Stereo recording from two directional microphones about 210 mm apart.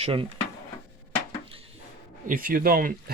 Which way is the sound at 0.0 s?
25° right (ahead or behind).